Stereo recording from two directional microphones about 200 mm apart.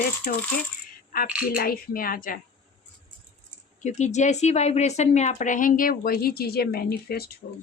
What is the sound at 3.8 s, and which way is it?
A woman's voice, 35° left (ahead or behind).